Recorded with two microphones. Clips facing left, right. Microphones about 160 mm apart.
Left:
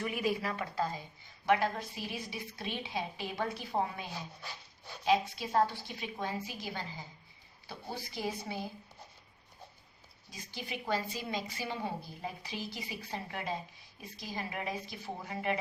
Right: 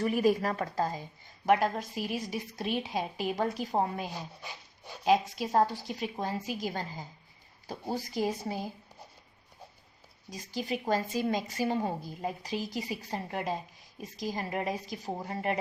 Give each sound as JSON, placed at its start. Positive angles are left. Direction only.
{"t": 0.0, "sound": "speech", "side_deg": -40}
{"t": 4.1, "sound": "speech", "side_deg": -10}
{"t": 5.0, "sound": "speech", "side_deg": -45}
{"t": 10.2, "sound": "speech", "side_deg": -40}